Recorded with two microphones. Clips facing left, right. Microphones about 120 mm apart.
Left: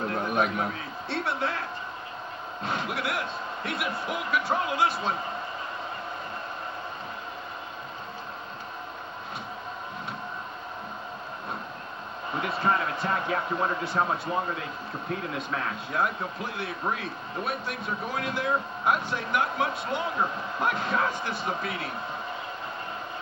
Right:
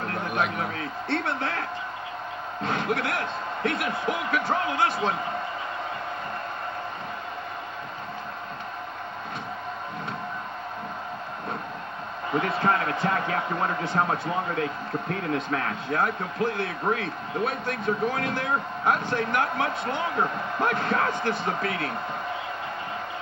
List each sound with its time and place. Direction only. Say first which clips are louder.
0.7 s speech: right 4 dB; 55° right (ahead or behind)
2.6 s speech: right 4 dB; 55° right (ahead or behind)
12.4 s speech: right 3 dB; 55° right (ahead or behind)